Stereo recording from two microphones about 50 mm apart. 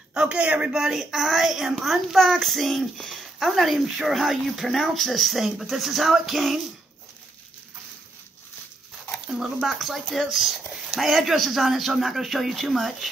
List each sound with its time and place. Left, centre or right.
0.1 s a sound: centre
0.4 s a man's voice: right
0.7 s a child's voice: centre
9.6 s a child's voice: centre